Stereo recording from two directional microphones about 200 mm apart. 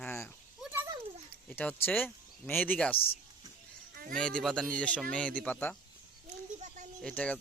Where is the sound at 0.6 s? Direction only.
10° right (ahead or behind).